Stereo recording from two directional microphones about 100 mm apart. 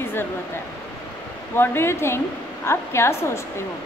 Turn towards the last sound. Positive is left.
turn(degrees=25)  # may be behind; listen again after turning